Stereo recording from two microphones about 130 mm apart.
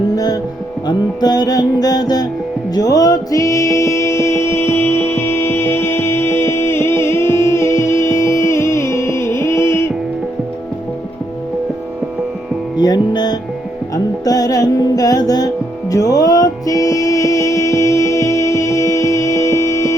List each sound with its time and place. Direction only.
0.9 s music: 30° left (ahead or behind)
12.7 s music: 30° left (ahead or behind)